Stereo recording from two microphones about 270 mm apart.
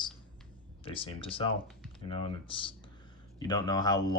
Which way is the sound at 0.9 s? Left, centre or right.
Centre.